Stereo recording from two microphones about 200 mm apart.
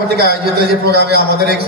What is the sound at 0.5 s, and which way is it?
Speech, 55° right (ahead or behind).